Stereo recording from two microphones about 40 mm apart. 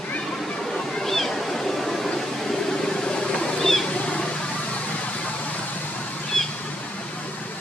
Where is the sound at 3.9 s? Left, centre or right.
Left.